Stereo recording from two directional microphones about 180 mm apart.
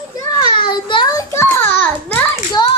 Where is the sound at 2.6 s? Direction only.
25° left (ahead or behind).